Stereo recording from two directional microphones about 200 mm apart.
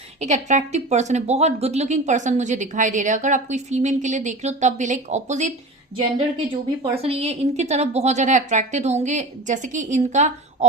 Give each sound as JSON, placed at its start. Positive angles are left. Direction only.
{"t": 0.2, "sound": "a woman's voice", "side_deg": -35}
{"t": 6.9, "sound": "a woman's voice", "side_deg": -30}